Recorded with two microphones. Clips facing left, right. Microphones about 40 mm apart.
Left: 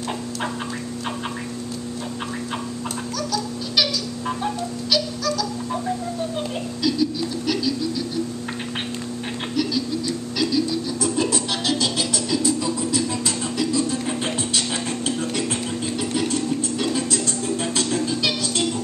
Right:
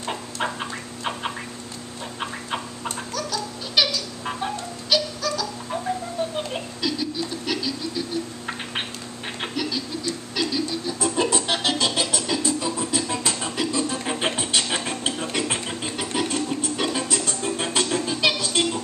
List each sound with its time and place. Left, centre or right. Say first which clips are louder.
3.2 s a sound: left 4 dB; centre
6.3 s music: left 2 dB; centre
10.3 s music: left 4 dB; centre